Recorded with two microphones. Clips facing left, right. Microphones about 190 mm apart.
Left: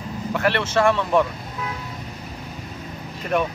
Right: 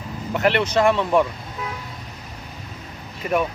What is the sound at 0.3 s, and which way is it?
Speech, 20° right (ahead or behind).